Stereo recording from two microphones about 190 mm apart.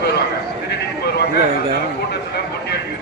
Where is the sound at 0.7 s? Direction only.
60° left (ahead or behind).